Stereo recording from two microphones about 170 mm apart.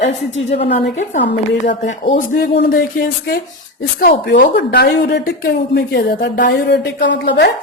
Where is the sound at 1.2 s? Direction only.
90° left.